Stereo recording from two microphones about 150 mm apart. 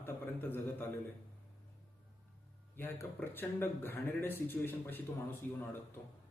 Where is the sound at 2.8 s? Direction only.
15° left (ahead or behind).